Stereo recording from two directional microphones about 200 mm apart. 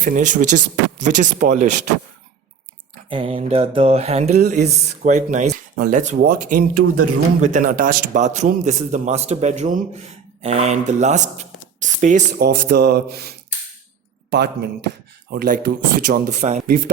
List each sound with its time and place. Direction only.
0.0 s speech: 40° right (ahead or behind)
3.1 s speech: 25° right (ahead or behind); by 14.5 s 55° right (ahead or behind)
15.3 s speech: 45° right (ahead or behind)
16.6 s speech: 50° right (ahead or behind)